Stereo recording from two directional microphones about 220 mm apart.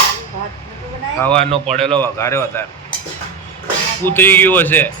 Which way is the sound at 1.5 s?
30° right (ahead or behind).